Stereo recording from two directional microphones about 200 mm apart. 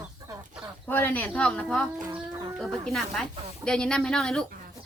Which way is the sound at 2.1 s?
25° right (ahead or behind).